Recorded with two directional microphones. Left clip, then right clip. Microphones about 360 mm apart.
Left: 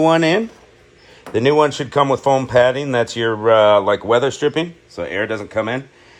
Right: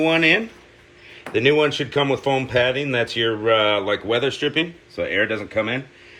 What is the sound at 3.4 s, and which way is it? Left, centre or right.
Speech, left.